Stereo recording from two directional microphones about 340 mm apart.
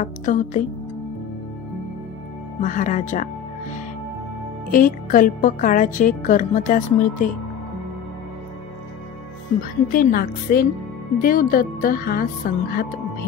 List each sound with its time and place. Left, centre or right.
0.0 s speech: left
2.6 s speech: left
4.6 s speech: left
9.6 s speech: left